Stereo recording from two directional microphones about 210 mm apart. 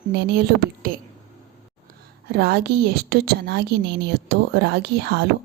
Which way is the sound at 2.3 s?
50° right (ahead or behind).